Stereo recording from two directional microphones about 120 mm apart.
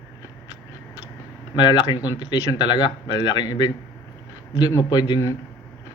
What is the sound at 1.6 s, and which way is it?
Speech, 35° left (ahead or behind).